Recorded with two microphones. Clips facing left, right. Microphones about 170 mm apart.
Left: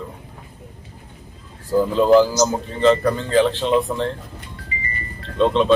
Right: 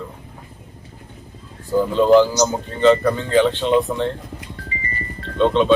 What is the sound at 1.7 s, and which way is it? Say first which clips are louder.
Speech: right 1 dB; 5° left (ahead or behind).